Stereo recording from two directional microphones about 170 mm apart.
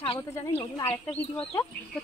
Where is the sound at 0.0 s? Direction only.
30° left (ahead or behind).